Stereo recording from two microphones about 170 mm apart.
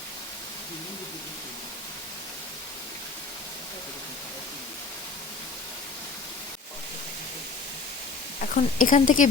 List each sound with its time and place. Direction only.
8.4 s a woman's voice: 50° left (ahead or behind)